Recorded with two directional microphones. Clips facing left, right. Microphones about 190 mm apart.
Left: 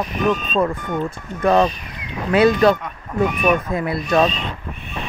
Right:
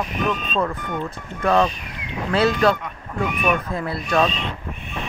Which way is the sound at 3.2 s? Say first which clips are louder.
Left 4 dB; 40° left (ahead or behind).